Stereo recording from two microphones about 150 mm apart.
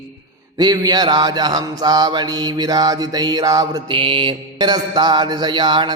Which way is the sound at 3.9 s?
35° right (ahead or behind).